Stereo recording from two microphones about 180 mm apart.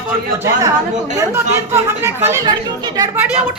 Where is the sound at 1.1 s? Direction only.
15° right (ahead or behind).